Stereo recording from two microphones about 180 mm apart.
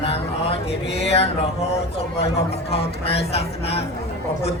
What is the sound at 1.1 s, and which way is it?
Speech, 35° left (ahead or behind).